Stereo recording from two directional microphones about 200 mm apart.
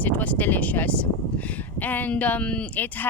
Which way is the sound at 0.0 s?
10° left (ahead or behind).